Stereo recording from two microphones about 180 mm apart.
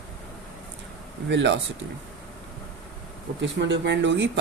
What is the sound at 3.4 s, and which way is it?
Speech, 80° right.